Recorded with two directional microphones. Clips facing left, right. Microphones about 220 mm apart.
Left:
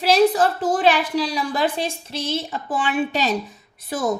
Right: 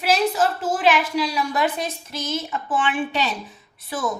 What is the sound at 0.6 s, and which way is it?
A woman's voice, 35° left (ahead or behind).